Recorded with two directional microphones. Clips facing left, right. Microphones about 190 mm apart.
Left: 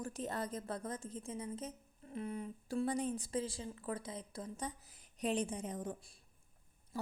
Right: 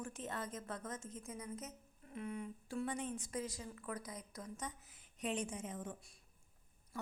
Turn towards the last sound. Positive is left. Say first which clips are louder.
# left 4 dB
turn(degrees=35)  # may be behind; listen again after turning